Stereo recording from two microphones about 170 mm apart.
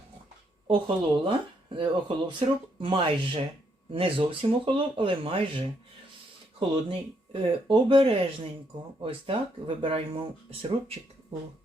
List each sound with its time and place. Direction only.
0.7 s speech: 30° right (ahead or behind)